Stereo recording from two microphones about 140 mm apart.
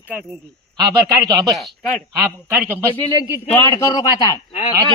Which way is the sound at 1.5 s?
Centre (ahead or behind).